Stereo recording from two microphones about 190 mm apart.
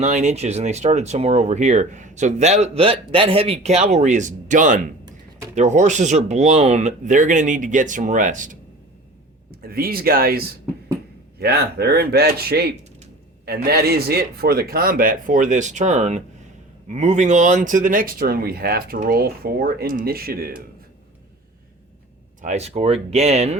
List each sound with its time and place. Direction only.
0.0 s speech: 40° right (ahead or behind)
9.6 s speech: 50° right (ahead or behind)
22.4 s speech: 35° right (ahead or behind)